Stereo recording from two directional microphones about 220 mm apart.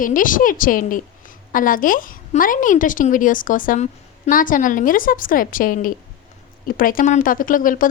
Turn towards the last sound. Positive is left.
turn(degrees=40)  # may be behind; listen again after turning